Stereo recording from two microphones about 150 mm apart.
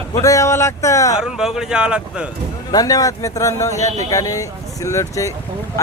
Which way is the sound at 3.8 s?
50° right (ahead or behind).